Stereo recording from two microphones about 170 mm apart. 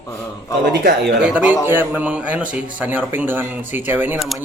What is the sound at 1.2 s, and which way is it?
A man's voice, 10° right (ahead or behind).